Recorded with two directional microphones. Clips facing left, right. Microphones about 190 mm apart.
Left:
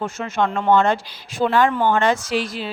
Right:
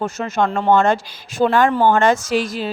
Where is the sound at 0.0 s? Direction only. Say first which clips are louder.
Right 2 dB; 40° right (ahead or behind).